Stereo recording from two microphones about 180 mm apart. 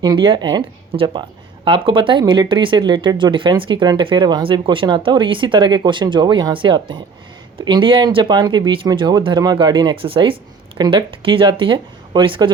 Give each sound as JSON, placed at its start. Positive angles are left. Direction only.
{"t": 0.0, "sound": "speech", "side_deg": -25}